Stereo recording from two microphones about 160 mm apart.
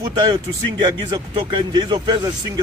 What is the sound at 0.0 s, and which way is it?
Speech, 30° right (ahead or behind).